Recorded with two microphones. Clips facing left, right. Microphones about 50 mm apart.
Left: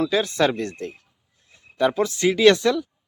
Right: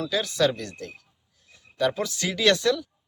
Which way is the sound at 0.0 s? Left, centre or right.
Left.